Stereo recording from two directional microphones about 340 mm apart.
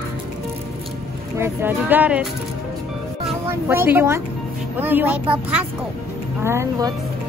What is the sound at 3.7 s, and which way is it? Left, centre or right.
Speech, centre.